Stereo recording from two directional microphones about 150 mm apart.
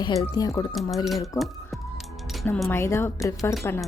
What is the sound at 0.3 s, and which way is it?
Speech, 25° left (ahead or behind).